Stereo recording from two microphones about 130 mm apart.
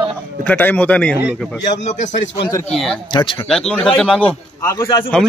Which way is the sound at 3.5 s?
5° left (ahead or behind).